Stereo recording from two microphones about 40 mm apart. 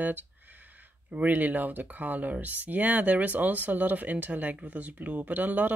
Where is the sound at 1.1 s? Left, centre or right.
Right.